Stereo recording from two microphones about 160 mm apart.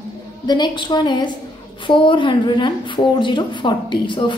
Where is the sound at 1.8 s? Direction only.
30° left (ahead or behind).